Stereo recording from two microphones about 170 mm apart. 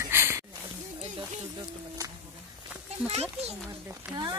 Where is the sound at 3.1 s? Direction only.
40° right (ahead or behind).